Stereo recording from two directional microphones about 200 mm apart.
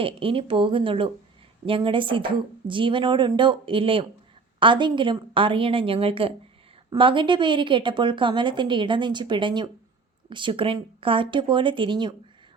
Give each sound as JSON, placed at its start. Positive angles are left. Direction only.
{"t": 0.0, "sound": "a woman's voice", "side_deg": -25}